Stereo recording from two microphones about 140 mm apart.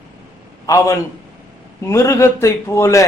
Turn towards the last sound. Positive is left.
turn(degrees=20)  # may be behind; listen again after turning